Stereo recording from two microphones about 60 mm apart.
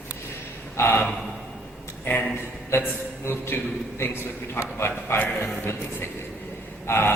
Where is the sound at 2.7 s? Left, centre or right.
Left.